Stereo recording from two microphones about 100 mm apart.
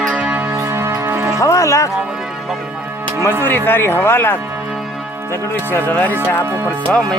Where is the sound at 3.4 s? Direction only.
20° left (ahead or behind).